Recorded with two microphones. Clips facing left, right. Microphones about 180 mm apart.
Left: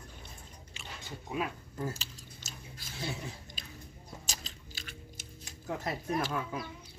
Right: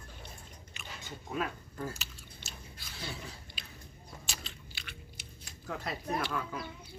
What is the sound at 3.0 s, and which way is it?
Chewing, 25° left (ahead or behind).